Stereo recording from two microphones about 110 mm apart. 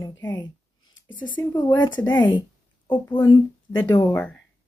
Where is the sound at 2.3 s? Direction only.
50° left (ahead or behind).